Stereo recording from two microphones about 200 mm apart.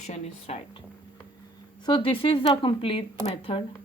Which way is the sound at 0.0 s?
35° left (ahead or behind).